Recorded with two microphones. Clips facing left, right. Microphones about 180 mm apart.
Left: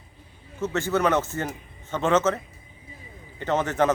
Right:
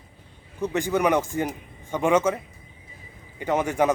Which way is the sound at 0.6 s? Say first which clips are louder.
Right 1 dB; 15° right (ahead or behind).